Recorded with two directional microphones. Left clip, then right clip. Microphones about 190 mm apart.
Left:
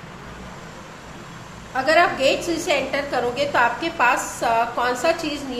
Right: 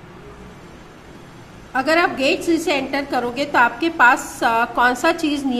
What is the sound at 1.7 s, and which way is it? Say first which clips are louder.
A woman's voice: even; 20° right (ahead or behind).